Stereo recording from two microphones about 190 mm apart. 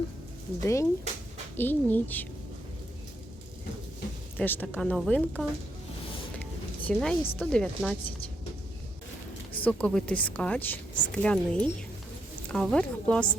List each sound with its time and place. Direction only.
0.6 s a woman's voice: 15° left (ahead or behind)
4.4 s a woman's voice: 10° left (ahead or behind)
6.8 s a woman's voice: 5° left (ahead or behind)
9.6 s a woman's voice: 5° left (ahead or behind)